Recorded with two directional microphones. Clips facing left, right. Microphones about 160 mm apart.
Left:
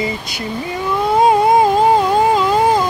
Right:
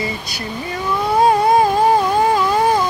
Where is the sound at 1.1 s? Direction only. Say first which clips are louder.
Left 1 dB; 20° left (ahead or behind).